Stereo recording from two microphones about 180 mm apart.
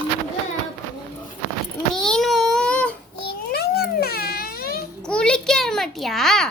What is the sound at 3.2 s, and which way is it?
Baby cry, 60° left (ahead or behind).